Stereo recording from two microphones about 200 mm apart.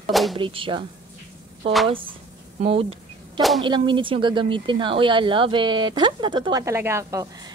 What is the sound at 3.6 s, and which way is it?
Speech, 25° right (ahead or behind).